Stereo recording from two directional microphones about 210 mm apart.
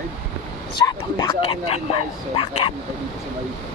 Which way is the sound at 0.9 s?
20° left (ahead or behind).